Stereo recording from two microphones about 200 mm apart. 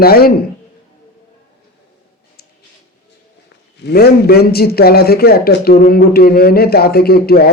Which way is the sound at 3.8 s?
55° left (ahead or behind).